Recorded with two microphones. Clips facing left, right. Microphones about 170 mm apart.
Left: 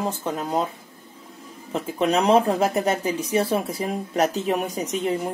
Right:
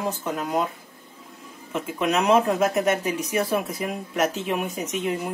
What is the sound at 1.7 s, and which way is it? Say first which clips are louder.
Speech: left 2 dB; 35° left (ahead or behind).